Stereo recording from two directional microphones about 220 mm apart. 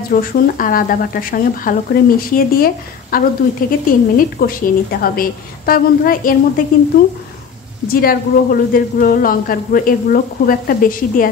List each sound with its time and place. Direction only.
0.1 s speech: 40° left (ahead or behind)